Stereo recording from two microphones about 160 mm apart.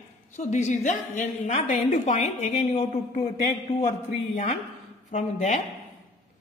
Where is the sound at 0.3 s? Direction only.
45° left (ahead or behind).